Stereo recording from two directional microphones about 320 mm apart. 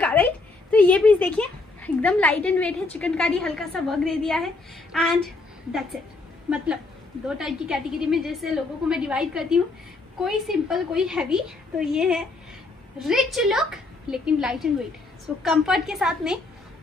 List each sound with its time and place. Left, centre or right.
0.0 s a woman's voice: centre
7.2 s a woman's voice: centre